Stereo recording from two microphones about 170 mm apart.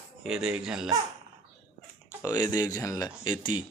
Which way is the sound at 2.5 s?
20° left (ahead or behind).